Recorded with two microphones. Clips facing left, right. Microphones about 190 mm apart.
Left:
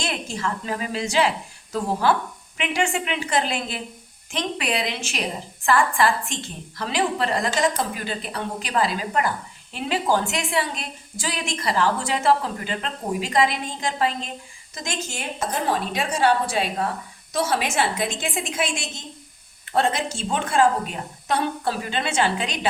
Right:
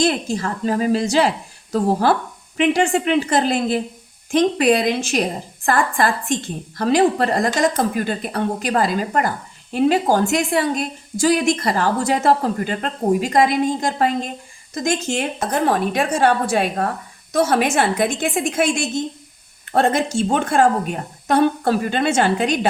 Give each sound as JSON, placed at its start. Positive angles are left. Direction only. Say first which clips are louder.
{"t": 0.0, "sound": "a woman's voice", "louder": "right 8 dB", "side_deg": -40}